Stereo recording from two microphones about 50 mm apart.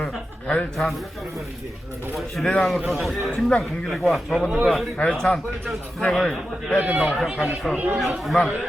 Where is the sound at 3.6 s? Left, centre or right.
Centre.